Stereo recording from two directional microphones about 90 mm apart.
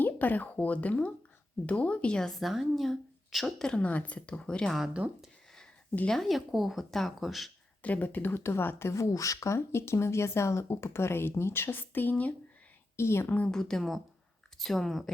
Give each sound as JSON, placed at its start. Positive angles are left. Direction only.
{"t": 0.0, "sound": "a woman's voice", "side_deg": 20}
{"t": 4.9, "sound": "speech", "side_deg": -15}
{"t": 6.1, "sound": "a woman's voice", "side_deg": 5}
{"t": 7.8, "sound": "speech", "side_deg": 20}
{"t": 13.5, "sound": "a woman's voice", "side_deg": 5}